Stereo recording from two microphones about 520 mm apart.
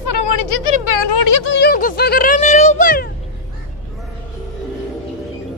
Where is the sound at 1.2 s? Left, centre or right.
Left.